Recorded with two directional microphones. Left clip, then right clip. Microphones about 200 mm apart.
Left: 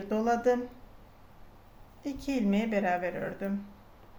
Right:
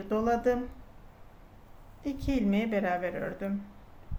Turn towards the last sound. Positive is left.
turn(degrees=0)  # may be behind; listen again after turning